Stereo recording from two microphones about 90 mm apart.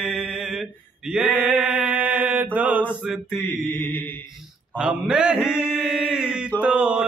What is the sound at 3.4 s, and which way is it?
Mantra, 25° left (ahead or behind).